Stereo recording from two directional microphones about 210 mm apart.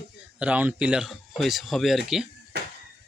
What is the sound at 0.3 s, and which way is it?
Speech, 5° right (ahead or behind).